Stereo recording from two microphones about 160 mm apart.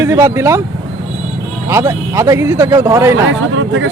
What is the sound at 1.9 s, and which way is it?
Speech, 15° right (ahead or behind).